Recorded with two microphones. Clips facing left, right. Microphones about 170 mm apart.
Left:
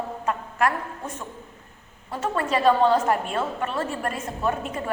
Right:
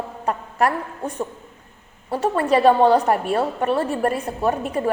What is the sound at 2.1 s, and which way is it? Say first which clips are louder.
A woman's voice: right 6 dB; 30° right (ahead or behind).